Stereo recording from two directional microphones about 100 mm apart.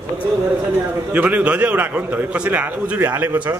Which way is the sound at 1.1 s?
15° right (ahead or behind).